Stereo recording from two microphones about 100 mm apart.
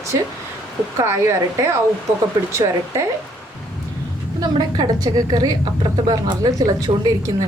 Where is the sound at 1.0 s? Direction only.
30° right (ahead or behind).